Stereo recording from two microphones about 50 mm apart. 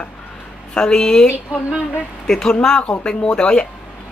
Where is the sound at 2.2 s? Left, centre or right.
Centre.